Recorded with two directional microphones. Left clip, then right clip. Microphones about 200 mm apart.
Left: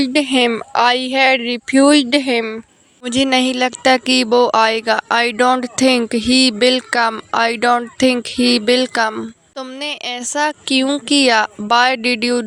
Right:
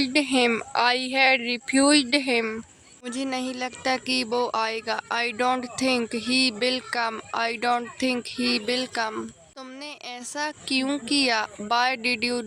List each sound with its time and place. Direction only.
0.0 s speech: 30° left (ahead or behind)
3.1 s speech: 40° left (ahead or behind)